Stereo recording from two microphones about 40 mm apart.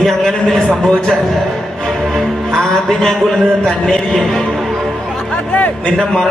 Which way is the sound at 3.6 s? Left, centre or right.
Centre.